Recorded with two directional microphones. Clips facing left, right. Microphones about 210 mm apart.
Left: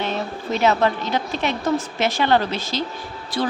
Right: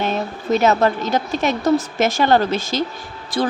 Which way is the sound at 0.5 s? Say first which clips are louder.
Right 3 dB; 45° right (ahead or behind).